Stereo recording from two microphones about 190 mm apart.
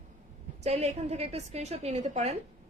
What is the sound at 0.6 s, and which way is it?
A woman's voice, 35° right (ahead or behind).